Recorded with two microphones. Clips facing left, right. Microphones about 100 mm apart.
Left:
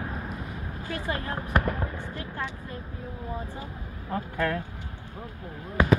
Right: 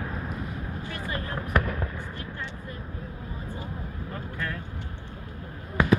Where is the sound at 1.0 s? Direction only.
30° left (ahead or behind).